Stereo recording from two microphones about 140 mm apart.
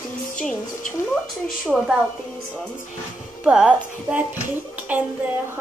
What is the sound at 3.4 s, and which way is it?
A woman's voice, 5° right (ahead or behind).